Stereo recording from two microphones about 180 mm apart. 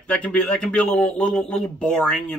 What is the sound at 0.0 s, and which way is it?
A man's voice, 5° left (ahead or behind).